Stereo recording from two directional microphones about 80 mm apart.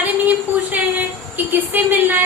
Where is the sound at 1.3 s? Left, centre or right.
Right.